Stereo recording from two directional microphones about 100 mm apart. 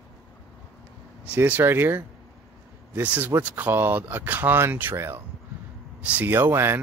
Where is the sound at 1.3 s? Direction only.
15° right (ahead or behind).